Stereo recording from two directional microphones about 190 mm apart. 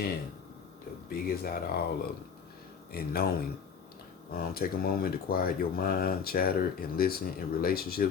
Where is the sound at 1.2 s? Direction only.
55° left (ahead or behind).